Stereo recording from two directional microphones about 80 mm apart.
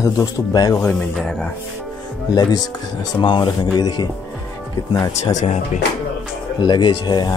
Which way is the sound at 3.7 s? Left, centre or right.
Left.